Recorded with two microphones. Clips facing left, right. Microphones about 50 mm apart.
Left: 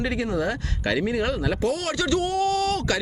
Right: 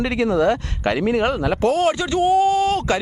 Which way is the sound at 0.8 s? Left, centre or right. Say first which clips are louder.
Right 5 dB; right.